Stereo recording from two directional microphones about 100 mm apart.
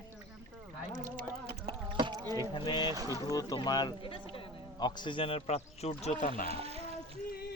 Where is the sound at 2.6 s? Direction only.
50° left (ahead or behind).